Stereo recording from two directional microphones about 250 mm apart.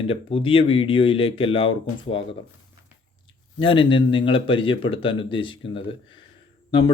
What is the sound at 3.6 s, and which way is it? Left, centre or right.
Speech, left.